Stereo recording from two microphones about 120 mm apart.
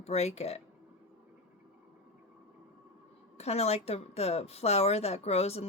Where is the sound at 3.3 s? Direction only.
60° left (ahead or behind).